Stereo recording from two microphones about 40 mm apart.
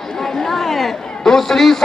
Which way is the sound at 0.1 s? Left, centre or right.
Centre.